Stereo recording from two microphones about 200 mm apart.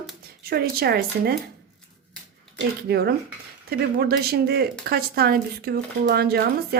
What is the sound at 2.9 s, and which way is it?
Speech, 50° right (ahead or behind).